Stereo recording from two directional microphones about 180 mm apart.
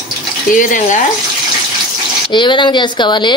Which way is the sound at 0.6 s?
45° left (ahead or behind).